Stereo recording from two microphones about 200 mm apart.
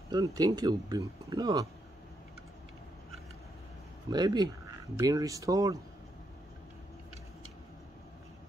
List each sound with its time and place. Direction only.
0.1 s speech: 20° right (ahead or behind)
4.1 s speech: 20° right (ahead or behind)